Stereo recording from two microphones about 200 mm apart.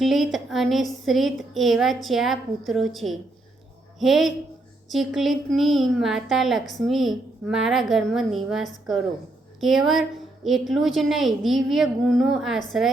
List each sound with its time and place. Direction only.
0.0 s a woman's voice: centre (ahead or behind)